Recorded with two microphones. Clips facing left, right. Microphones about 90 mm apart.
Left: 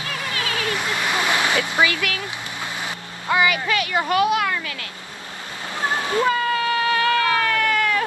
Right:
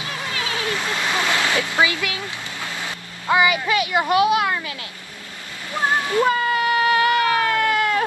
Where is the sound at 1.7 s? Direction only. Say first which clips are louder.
Even; 20° right (ahead or behind).